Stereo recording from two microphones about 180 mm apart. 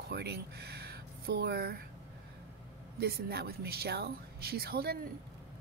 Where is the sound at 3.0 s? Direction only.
60° right (ahead or behind).